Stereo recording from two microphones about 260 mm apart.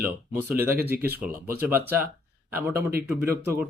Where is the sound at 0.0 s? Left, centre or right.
Centre.